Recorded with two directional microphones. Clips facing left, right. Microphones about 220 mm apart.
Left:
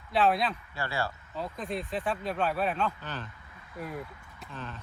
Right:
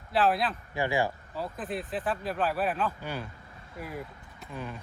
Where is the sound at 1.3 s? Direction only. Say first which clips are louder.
Even; 5° right (ahead or behind).